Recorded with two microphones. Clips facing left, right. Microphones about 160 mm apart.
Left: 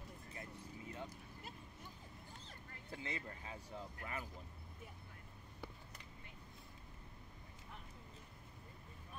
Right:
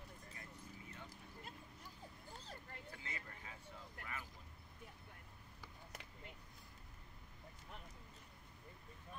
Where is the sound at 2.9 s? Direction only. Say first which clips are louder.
Left 10 dB; 30° left (ahead or behind).